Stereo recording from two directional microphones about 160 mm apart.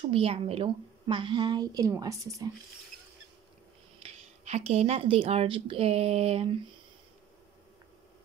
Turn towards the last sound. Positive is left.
turn(degrees=-35)  # may be behind; listen again after turning